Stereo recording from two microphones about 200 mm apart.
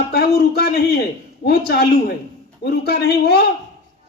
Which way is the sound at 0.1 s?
50° left (ahead or behind).